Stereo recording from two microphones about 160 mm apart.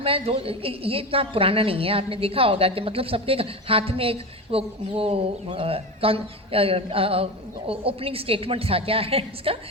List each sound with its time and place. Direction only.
0.0 s a woman's voice: 35° right (ahead or behind)